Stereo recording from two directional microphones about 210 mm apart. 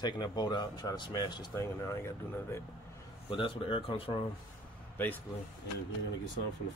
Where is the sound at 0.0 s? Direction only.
20° left (ahead or behind).